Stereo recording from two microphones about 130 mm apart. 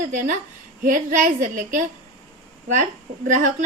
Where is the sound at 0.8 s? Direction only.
90° right.